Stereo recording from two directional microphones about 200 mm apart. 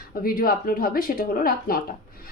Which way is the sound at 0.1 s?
45° left (ahead or behind).